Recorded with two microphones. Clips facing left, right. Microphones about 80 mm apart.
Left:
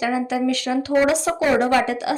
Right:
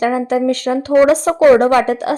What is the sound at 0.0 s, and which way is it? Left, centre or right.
Speech, right.